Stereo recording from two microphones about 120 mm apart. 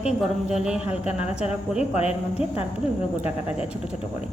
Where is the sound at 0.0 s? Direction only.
5° right (ahead or behind).